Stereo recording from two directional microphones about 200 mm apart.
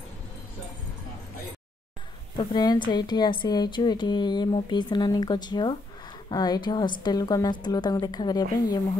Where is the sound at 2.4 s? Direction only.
20° left (ahead or behind).